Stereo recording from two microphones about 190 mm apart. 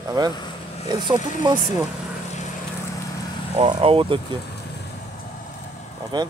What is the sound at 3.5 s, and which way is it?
Speech, 30° right (ahead or behind).